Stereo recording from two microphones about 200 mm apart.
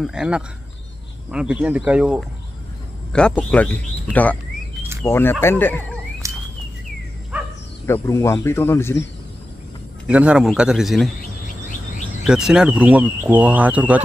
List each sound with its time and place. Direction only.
0.0 s a man's voice: 5° right (ahead or behind)
6.2 s a sound: 15° right (ahead or behind)
7.8 s speech: 15° left (ahead or behind)
10.0 s a man's voice: 5° right (ahead or behind)
12.3 s speech: 5° right (ahead or behind)